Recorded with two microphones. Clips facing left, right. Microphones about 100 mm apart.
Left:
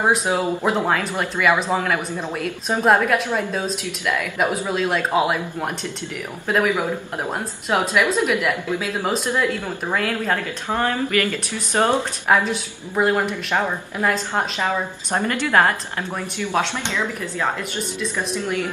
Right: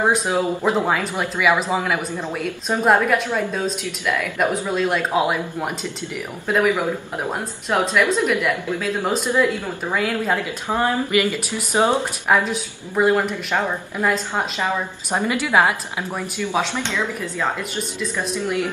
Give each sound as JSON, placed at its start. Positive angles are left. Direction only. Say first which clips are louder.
{"t": 0.0, "sound": "speech", "louder": "even", "side_deg": 0}
{"t": 0.3, "sound": "speech", "louder": "right 1 dB", "side_deg": 10}
{"t": 0.7, "sound": "speech", "louder": "even", "side_deg": -5}
{"t": 7.7, "sound": "speech", "louder": "right 1 dB", "side_deg": 5}
{"t": 9.3, "sound": "speech", "louder": "right 2 dB", "side_deg": -10}
{"t": 12.3, "sound": "speech", "louder": "even", "side_deg": 0}
{"t": 16.7, "sound": "speech", "louder": "right 1 dB", "side_deg": 15}